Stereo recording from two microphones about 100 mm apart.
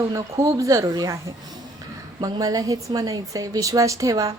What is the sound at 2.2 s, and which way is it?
A woman's voice, 35° right (ahead or behind).